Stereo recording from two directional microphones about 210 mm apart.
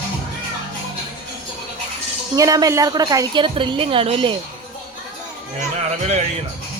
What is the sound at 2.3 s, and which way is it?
A woman's voice, 15° right (ahead or behind).